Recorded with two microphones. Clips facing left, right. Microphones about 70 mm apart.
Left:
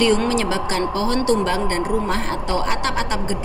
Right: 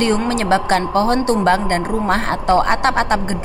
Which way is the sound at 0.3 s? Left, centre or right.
Right.